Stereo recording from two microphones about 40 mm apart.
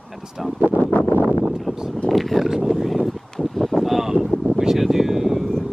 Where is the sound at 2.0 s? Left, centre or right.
Centre.